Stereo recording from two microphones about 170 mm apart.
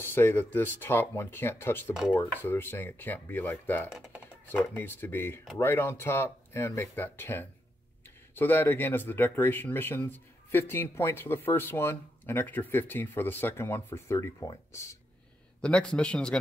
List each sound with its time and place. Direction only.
0.0 s speech: 10° left (ahead or behind)
3.9 s speech: 5° right (ahead or behind)
4.7 s speech: 10° left (ahead or behind)
15.6 s a man's voice: 5° left (ahead or behind)